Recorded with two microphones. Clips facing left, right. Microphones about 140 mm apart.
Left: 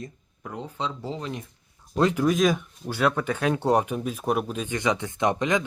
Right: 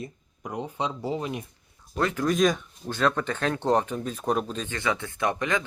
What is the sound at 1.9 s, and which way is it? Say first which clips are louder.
Speech: left 4 dB; 15° left (ahead or behind).